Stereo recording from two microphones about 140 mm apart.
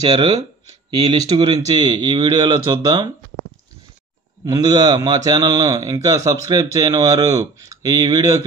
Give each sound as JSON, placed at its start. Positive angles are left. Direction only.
{"t": 0.0, "sound": "speech", "side_deg": -35}
{"t": 4.5, "sound": "a man's voice", "side_deg": -30}